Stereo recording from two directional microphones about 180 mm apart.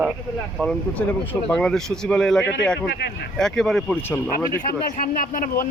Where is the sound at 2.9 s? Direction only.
65° left (ahead or behind).